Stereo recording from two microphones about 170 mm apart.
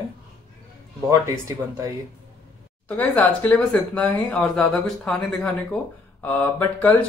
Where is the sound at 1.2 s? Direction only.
20° right (ahead or behind).